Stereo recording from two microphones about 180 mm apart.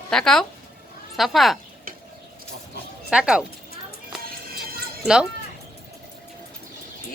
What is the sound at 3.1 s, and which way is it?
Speech, 5° right (ahead or behind).